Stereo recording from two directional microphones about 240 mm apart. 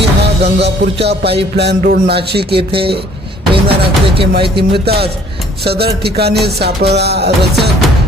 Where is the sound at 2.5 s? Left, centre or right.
Right.